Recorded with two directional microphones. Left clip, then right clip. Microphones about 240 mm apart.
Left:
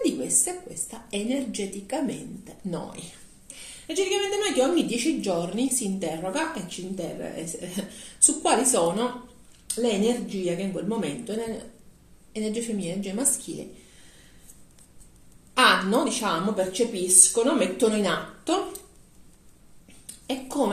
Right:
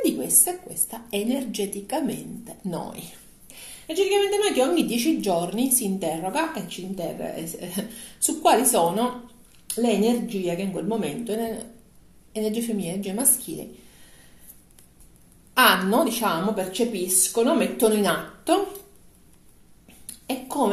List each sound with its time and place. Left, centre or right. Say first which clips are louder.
0.0 s a woman's voice: right 2 dB; right
10.2 s a woman's voice: right 1 dB; right
12.3 s a woman's voice: right 3 dB; right
15.5 s a woman's voice: right 2 dB; right
20.1 s a sound: right 1 dB; right